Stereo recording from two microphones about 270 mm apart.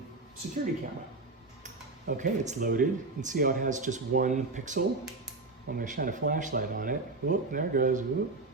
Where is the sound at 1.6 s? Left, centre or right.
Right.